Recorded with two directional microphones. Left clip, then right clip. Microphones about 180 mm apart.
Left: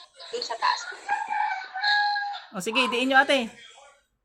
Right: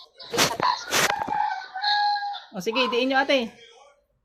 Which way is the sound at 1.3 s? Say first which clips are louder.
Right 1 dB; 5° left (ahead or behind).